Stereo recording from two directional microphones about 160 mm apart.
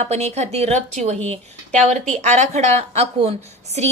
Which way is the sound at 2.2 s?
45° right (ahead or behind).